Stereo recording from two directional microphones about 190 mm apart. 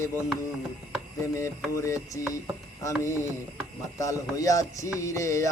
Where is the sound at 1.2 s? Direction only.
15° left (ahead or behind).